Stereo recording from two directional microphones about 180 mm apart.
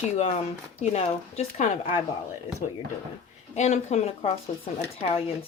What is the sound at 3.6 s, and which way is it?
Speech, 40° left (ahead or behind).